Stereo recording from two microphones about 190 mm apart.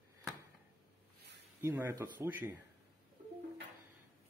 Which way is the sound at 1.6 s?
10° right (ahead or behind).